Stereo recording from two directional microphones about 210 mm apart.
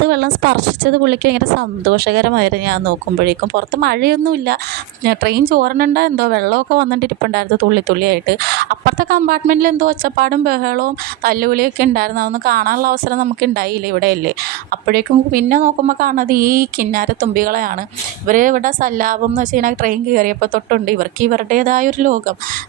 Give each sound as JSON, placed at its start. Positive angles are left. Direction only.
{"t": 0.0, "sound": "a woman's voice", "side_deg": -50}